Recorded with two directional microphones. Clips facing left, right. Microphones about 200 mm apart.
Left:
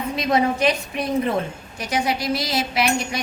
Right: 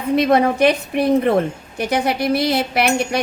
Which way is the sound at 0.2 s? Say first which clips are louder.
Right 5 dB; 60° right (ahead or behind).